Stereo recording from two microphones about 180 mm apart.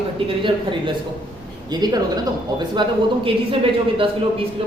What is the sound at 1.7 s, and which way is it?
Speech, 20° right (ahead or behind).